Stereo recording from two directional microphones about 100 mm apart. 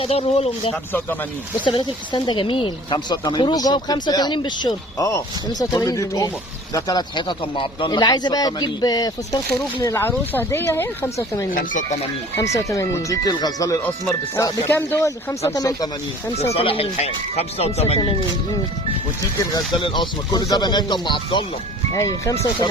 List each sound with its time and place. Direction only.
0.0 s speech: 85° left
1.6 s speech: 55° left (ahead or behind); by 9.4 s 40° left (ahead or behind)
9.8 s speech: 25° left (ahead or behind); by 13.7 s 40° left (ahead or behind)
14.7 s speech: 20° left (ahead or behind); by 15.9 s 40° left (ahead or behind)
16.3 s speech: 90° left
19.7 s speech: 55° left (ahead or behind)
21.9 s speech: 30° left (ahead or behind)